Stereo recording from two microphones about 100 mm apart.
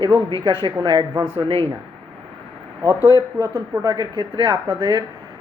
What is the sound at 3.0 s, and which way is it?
Speech, 40° left (ahead or behind).